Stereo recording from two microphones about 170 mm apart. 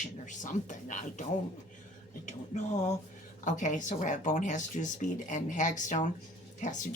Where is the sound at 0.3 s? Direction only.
50° left (ahead or behind).